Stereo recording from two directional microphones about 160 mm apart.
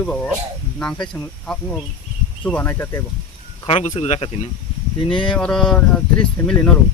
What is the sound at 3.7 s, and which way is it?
Speech, 45° left (ahead or behind).